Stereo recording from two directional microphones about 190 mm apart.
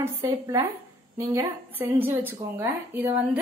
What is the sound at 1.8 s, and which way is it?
A woman's voice, 10° right (ahead or behind).